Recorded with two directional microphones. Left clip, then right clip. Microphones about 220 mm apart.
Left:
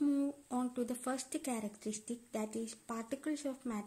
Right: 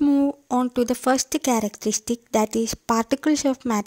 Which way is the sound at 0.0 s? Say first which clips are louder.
Right 15 dB; 35° right (ahead or behind).